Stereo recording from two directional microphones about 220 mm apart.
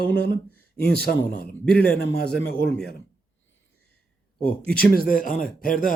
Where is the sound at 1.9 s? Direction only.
45° left (ahead or behind).